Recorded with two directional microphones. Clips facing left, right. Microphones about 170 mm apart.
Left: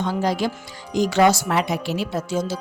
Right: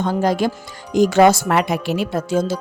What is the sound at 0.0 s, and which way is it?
Speech, 50° right (ahead or behind).